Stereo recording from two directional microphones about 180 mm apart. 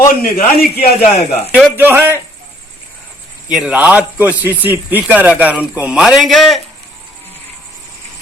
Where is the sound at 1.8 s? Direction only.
10° right (ahead or behind).